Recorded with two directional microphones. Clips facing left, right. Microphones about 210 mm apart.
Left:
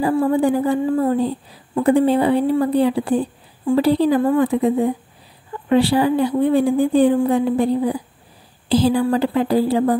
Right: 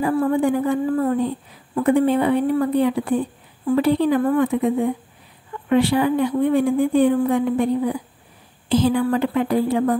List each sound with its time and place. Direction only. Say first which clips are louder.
0.0 s a woman's voice: left 2 dB; 30° left (ahead or behind)